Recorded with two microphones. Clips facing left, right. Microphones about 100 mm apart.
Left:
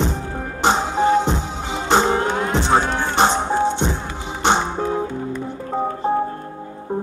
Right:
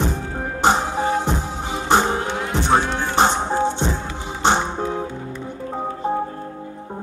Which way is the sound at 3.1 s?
20° left (ahead or behind).